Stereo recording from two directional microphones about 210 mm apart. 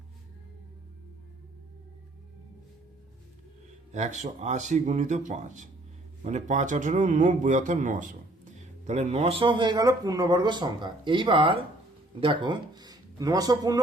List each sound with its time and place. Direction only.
3.9 s speech: 35° right (ahead or behind); by 13.8 s 15° right (ahead or behind)